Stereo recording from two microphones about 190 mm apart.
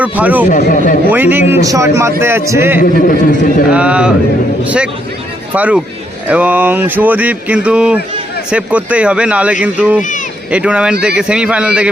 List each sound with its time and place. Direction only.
0.0 s speech: 10° right (ahead or behind)
0.5 s speech: 45° left (ahead or behind)
1.1 s speech: 10° right (ahead or behind)
2.8 s speech: 45° left (ahead or behind)
3.7 s a man's voice: 5° right (ahead or behind)
10.0 s speech: 40° left (ahead or behind)
10.5 s a man's voice: 5° right (ahead or behind)